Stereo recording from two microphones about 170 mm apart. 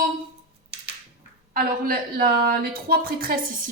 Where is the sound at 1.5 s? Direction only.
60° right (ahead or behind).